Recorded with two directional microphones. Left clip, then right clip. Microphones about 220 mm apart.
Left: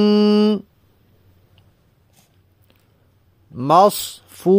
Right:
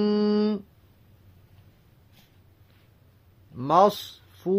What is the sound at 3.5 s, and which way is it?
Speech, 40° left (ahead or behind).